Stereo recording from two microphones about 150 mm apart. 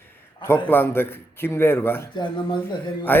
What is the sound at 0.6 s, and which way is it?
A man's voice, 15° left (ahead or behind).